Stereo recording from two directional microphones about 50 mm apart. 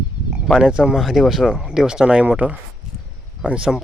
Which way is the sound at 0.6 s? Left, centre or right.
Centre.